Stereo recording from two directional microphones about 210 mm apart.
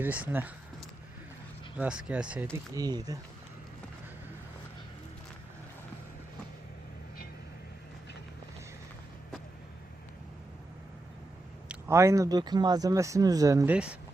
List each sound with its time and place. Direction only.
0.0 s speech: 10° right (ahead or behind)
1.7 s speech: 5° right (ahead or behind)
2.7 s speech: 20° right (ahead or behind)
11.7 s speech: 15° right (ahead or behind)